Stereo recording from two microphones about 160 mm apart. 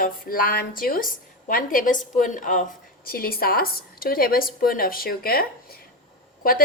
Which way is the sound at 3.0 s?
70° left (ahead or behind).